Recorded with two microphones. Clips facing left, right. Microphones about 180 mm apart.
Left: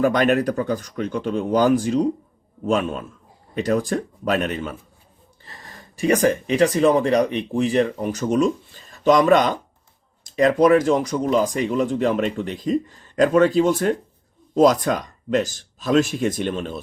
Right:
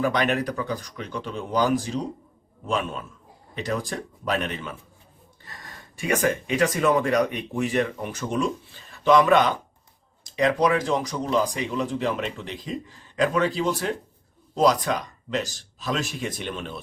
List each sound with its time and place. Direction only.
0.0 s speech: 45° left (ahead or behind)